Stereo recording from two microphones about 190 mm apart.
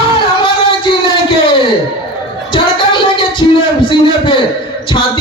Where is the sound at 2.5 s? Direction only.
25° left (ahead or behind).